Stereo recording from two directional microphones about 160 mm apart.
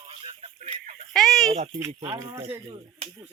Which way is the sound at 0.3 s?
45° right (ahead or behind).